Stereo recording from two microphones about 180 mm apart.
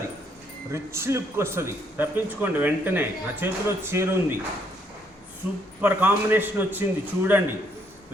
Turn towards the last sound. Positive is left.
turn(degrees=-10)  # may be behind; listen again after turning